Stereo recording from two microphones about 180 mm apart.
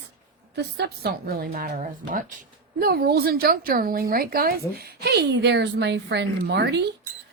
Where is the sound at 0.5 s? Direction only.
70° right (ahead or behind).